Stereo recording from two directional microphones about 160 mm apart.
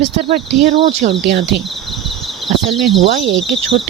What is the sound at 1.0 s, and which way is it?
Speech, 60° right (ahead or behind).